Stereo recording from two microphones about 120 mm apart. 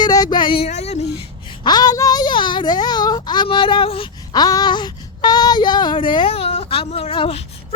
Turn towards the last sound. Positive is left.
turn(degrees=50)  # may be behind; listen again after turning